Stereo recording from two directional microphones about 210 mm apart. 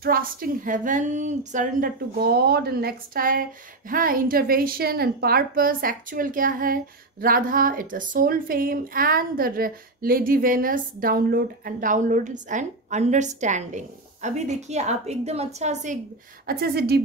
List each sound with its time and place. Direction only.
0.0 s a woman's voice: 45° right (ahead or behind)
16.4 s speech: 45° right (ahead or behind)